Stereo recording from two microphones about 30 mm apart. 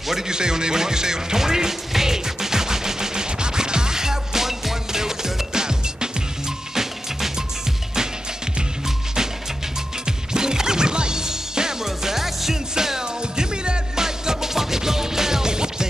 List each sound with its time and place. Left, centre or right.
0.3 s speech: right
1.9 s music: centre
6.7 s music: centre
10.0 s music: right